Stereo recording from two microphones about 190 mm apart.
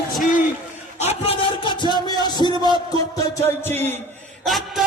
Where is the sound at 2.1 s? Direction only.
20° left (ahead or behind).